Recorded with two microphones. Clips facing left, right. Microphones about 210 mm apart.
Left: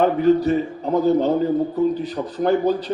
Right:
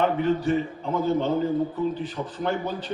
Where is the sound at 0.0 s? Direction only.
40° left (ahead or behind).